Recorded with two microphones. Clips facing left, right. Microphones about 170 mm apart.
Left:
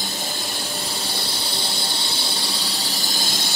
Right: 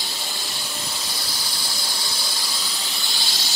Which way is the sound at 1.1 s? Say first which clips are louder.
Left 5 dB; 30° left (ahead or behind).